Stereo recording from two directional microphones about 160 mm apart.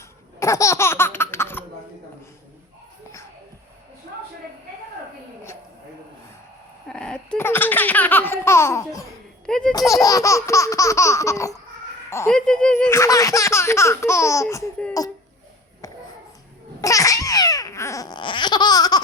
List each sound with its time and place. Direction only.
0.3 s laughter: 20° left (ahead or behind)
6.8 s laughter: 5° left (ahead or behind); by 9.0 s 20° left (ahead or behind)
9.5 s a sound: 5° left (ahead or behind)
9.9 s laughter: 20° left (ahead or behind)
12.3 s speech: 5° left (ahead or behind)
15.0 s laughter: 25° left (ahead or behind)
16.8 s babbling: 20° left (ahead or behind)